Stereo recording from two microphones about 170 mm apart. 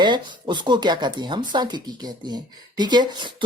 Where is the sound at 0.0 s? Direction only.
25° right (ahead or behind).